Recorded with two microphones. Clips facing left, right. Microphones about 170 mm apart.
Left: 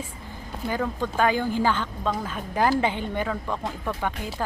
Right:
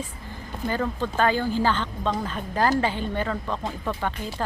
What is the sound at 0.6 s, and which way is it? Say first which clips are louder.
Speech: right 1 dB; 10° left (ahead or behind).